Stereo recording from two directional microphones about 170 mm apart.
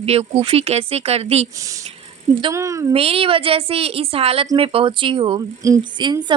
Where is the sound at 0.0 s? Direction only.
35° right (ahead or behind).